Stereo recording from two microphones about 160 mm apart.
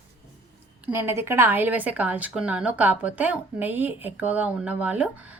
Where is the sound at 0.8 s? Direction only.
15° right (ahead or behind).